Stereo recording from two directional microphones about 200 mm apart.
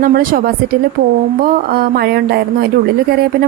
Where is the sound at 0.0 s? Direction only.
45° right (ahead or behind).